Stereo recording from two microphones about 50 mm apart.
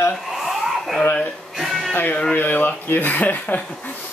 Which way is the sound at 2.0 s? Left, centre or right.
Left.